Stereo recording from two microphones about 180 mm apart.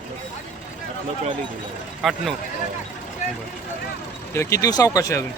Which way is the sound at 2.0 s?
Centre (ahead or behind).